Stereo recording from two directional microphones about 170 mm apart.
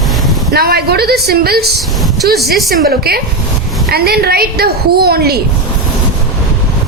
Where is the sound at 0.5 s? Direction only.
65° right (ahead or behind).